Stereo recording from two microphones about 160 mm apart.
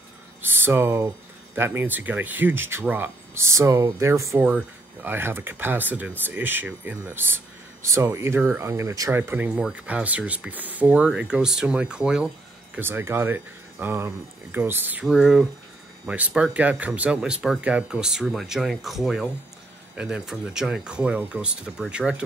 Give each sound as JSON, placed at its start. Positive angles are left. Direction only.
{"t": 0.4, "sound": "speech", "side_deg": -15}